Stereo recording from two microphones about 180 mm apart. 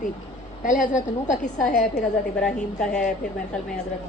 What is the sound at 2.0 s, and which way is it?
A woman's voice, 5° left (ahead or behind).